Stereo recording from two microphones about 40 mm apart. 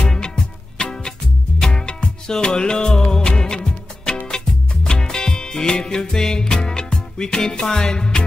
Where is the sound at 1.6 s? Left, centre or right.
Centre.